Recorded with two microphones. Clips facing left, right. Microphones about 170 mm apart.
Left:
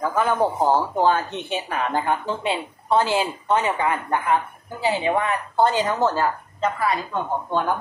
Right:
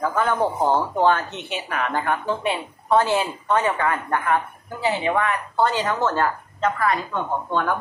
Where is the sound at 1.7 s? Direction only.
30° left (ahead or behind); by 6.9 s 10° left (ahead or behind).